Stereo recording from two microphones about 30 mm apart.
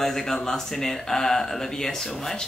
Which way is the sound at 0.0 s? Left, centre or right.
Centre.